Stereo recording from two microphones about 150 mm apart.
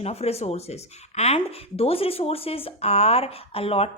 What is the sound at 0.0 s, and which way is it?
Speech, 45° left (ahead or behind).